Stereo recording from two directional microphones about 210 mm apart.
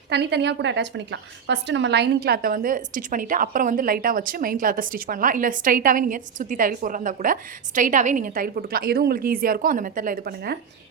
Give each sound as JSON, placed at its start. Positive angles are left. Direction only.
{"t": 0.1, "sound": "a woman's voice", "side_deg": -55}